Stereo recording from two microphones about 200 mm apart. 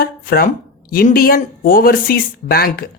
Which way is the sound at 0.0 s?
50° left (ahead or behind).